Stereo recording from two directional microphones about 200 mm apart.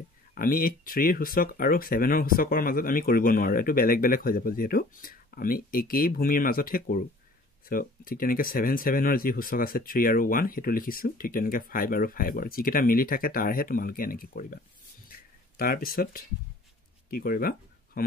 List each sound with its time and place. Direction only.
0.3 s speech: 45° left (ahead or behind)
15.0 s a sound: 45° left (ahead or behind)
17.1 s speech: 45° left (ahead or behind)